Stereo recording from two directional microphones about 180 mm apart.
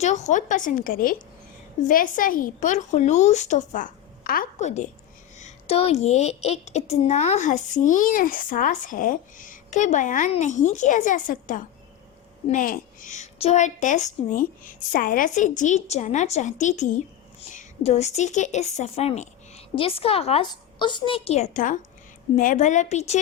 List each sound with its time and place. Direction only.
0.0 s a woman's voice: 40° left (ahead or behind)